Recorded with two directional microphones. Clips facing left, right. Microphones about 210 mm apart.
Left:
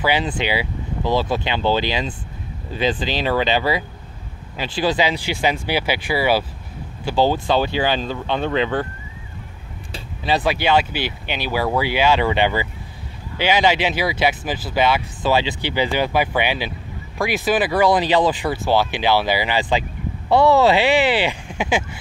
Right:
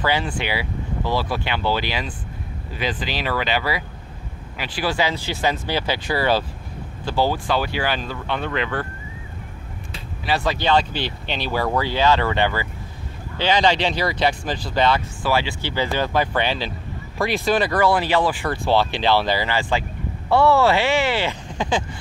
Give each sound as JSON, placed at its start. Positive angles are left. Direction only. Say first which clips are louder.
{"t": 0.0, "sound": "speech", "louder": "left 2 dB", "side_deg": 15}
{"t": 7.1, "sound": "speech", "louder": "left 3 dB", "side_deg": 20}
{"t": 9.9, "sound": "speech", "louder": "left 3 dB", "side_deg": 20}
{"t": 15.2, "sound": "speech", "louder": "left 4 dB", "side_deg": 20}
{"t": 17.8, "sound": "speech", "louder": "left 4 dB", "side_deg": 15}
{"t": 18.5, "sound": "speech", "louder": "left 1 dB", "side_deg": 5}